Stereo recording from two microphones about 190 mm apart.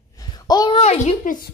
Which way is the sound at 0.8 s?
35° left (ahead or behind).